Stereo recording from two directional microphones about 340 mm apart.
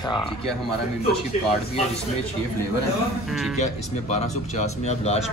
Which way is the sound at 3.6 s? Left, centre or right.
Centre.